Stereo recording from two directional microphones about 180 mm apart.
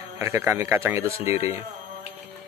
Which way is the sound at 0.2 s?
15° right (ahead or behind).